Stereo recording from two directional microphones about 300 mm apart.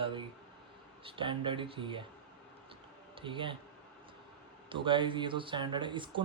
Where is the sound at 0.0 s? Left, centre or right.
Centre.